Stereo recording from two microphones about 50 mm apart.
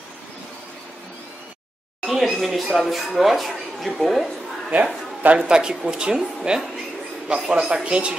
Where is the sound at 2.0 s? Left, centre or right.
Centre.